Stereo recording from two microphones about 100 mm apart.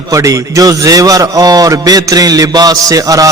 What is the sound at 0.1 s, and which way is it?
A man's voice, 30° right (ahead or behind).